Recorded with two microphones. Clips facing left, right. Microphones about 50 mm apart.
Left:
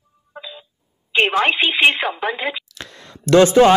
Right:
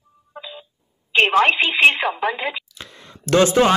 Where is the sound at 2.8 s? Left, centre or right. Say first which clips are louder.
Left 3 dB; centre.